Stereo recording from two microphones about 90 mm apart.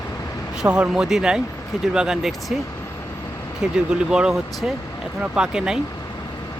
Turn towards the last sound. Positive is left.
turn(degrees=-10)  # may be behind; listen again after turning